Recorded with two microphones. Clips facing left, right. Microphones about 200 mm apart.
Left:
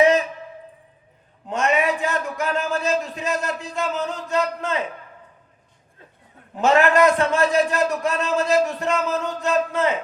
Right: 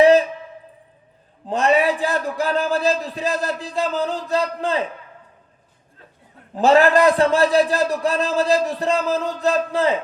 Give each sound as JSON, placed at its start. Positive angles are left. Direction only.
{"t": 0.0, "sound": "a sound", "side_deg": -35}
{"t": 1.5, "sound": "a man's voice", "side_deg": -35}
{"t": 6.6, "sound": "a man's voice", "side_deg": -35}